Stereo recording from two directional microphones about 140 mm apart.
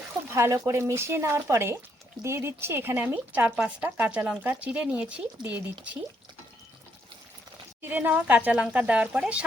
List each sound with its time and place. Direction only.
0.3 s speech: 20° right (ahead or behind)
7.8 s speech: 15° right (ahead or behind)